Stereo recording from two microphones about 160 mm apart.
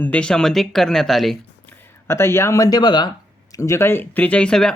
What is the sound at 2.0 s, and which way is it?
Speech, 15° left (ahead or behind).